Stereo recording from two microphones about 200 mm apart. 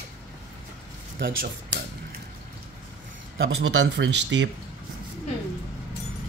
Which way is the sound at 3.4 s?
70° right (ahead or behind).